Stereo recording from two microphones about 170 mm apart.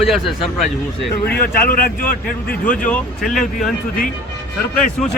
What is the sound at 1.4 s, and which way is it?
Speech, 60° left (ahead or behind).